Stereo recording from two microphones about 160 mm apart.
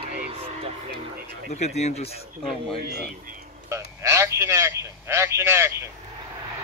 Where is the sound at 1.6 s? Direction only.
45° left (ahead or behind).